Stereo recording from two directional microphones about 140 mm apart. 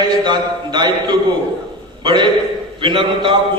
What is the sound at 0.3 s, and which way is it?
Speech, 30° right (ahead or behind).